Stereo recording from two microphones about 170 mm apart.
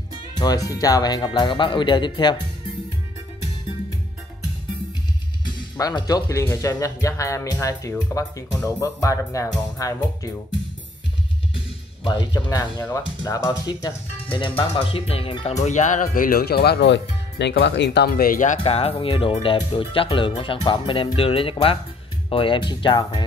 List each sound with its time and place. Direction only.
0.4 s speech: 20° left (ahead or behind)
5.4 s speech: 25° left (ahead or behind)
12.0 s speech: 25° left (ahead or behind)
15.6 s speech: 45° left (ahead or behind)
18.6 s speech: 35° left (ahead or behind)